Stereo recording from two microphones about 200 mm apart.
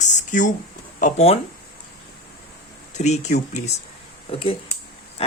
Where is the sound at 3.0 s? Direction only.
35° left (ahead or behind).